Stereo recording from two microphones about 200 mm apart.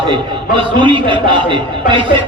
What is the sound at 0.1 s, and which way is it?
Speech, 25° right (ahead or behind).